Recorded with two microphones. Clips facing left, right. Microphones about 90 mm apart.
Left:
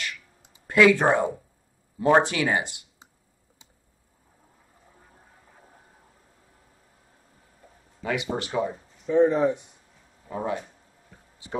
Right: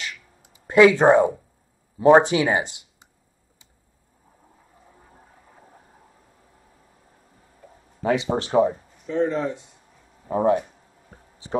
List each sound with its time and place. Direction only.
0.7 s speech: 20° right (ahead or behind)
8.0 s speech: 35° right (ahead or behind)
9.0 s speech: 10° left (ahead or behind)
10.2 s speech: 40° right (ahead or behind)